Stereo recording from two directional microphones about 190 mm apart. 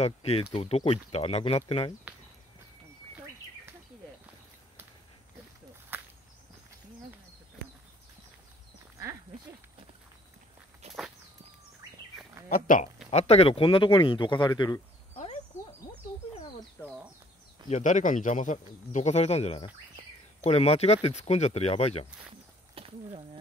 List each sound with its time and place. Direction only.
0.0 s speech: 35° left (ahead or behind)
5.9 s whip: 10° right (ahead or behind)
12.4 s speech: 45° left (ahead or behind)
13.1 s speech: 35° left (ahead or behind)
15.5 s frog: 15° left (ahead or behind)
17.6 s speech: 40° left (ahead or behind)
22.8 s a sound: 30° right (ahead or behind)